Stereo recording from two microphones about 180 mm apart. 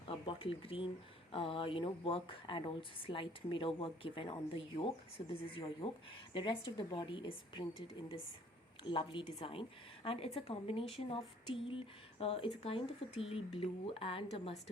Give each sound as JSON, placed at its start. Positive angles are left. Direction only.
{"t": 0.1, "sound": "a woman's voice", "side_deg": 30}